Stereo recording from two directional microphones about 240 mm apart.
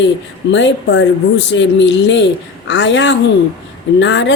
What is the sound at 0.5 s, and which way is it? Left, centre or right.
Speech, left.